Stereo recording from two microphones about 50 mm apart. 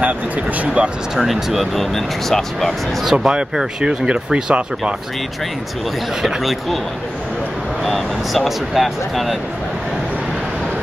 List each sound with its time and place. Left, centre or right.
0.0 s speech: right
1.1 s speech: centre
3.0 s speech: centre
6.2 s speech: centre
7.8 s speech: centre